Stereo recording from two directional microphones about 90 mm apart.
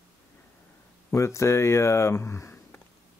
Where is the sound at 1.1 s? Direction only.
35° left (ahead or behind).